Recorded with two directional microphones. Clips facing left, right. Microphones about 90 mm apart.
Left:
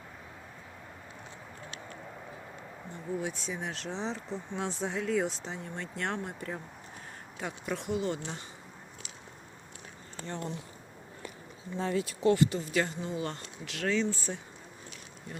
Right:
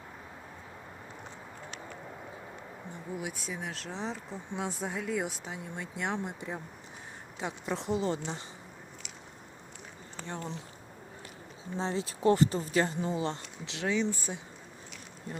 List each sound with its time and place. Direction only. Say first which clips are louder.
3.2 s speech: left 2 dB; 5° right (ahead or behind); by 8.4 s 30° right (ahead or behind)
11.8 s speech: left 1 dB; 25° right (ahead or behind)
13.1 s speech: right 3 dB; 25° right (ahead or behind)